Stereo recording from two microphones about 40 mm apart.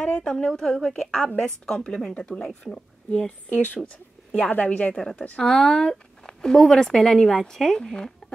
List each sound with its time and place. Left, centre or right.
0.0 s speech: left
3.4 s speech: left
4.3 s speech: left
5.4 s speech: centre